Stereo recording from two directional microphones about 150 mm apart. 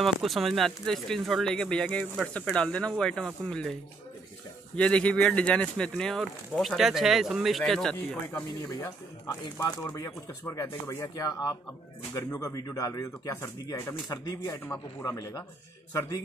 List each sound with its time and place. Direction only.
0.0 s speech: centre (ahead or behind)
4.7 s speech: 5° left (ahead or behind)
8.7 s speech: 25° left (ahead or behind)
14.6 s a man's voice: 10° left (ahead or behind)
15.0 s a man's voice: 25° left (ahead or behind)